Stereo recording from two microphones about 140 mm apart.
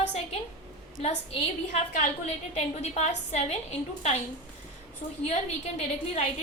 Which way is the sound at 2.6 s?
55° left (ahead or behind).